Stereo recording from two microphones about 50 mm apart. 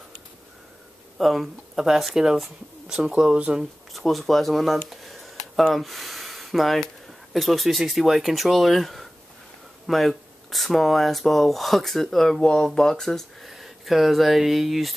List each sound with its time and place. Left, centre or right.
1.1 s speech: centre
3.0 s speech: centre
3.9 s speech: centre
4.8 s a sound: centre
7.3 s speech: centre